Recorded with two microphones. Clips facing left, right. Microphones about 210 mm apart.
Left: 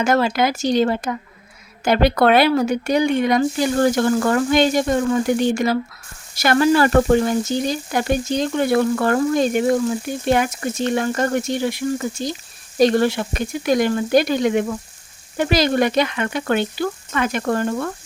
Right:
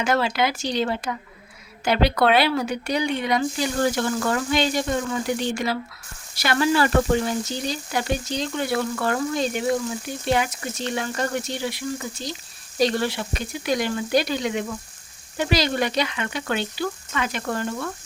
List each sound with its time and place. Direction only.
0.0 s speech: 45° left (ahead or behind)
12.8 s speech: 50° left (ahead or behind)